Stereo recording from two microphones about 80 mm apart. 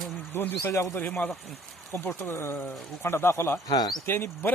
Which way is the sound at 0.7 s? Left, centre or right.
Left.